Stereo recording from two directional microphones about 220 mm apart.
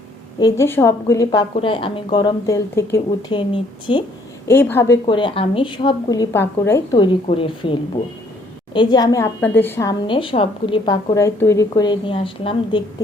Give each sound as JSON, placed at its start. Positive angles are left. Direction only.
{"t": 0.3, "sound": "a woman's voice", "side_deg": 15}
{"t": 4.4, "sound": "a woman's voice", "side_deg": 10}
{"t": 5.0, "sound": "a woman's voice", "side_deg": 20}
{"t": 10.1, "sound": "a woman's voice", "side_deg": 25}